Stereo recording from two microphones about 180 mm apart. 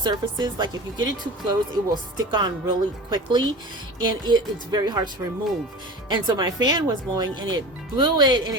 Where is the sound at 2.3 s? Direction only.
25° right (ahead or behind).